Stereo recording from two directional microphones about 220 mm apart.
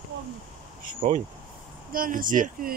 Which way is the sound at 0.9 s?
35° right (ahead or behind).